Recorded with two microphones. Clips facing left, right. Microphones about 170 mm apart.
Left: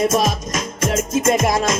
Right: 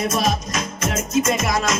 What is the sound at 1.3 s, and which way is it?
Music, 50° left (ahead or behind).